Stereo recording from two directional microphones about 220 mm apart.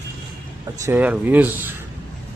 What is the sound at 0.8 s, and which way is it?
Speech, 10° right (ahead or behind).